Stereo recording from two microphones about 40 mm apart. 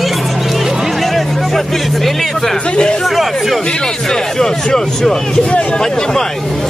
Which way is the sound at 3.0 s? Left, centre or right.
Centre.